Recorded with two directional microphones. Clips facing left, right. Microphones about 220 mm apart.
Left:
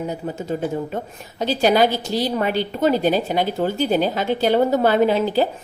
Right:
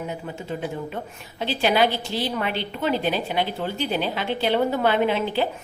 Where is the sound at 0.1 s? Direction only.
45° left (ahead or behind).